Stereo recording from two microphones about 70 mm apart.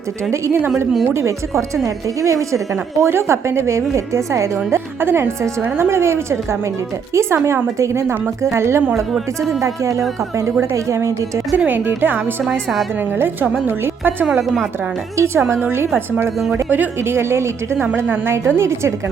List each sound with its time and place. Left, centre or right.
1.0 s a woman's voice: right
11.5 s a woman's voice: right